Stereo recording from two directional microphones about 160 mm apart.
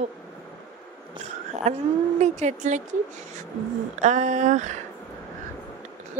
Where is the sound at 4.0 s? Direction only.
50° right (ahead or behind).